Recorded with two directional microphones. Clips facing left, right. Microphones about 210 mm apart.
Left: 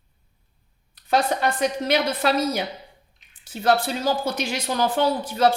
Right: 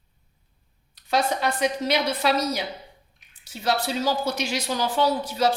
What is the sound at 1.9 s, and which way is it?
Speech, 50° left (ahead or behind).